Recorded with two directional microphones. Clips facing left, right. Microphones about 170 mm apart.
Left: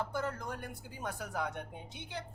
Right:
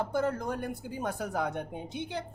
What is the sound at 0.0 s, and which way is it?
A woman's voice, 25° right (ahead or behind).